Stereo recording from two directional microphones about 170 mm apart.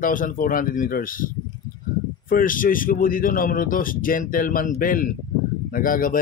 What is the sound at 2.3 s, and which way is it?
A man's voice, 55° left (ahead or behind).